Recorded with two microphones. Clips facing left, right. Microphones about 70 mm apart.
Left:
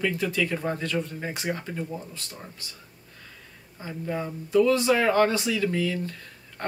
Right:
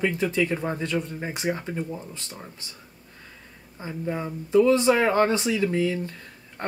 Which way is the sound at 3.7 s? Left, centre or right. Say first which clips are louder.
Right 1 dB; centre.